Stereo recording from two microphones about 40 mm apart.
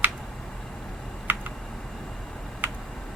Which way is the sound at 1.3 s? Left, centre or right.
Right.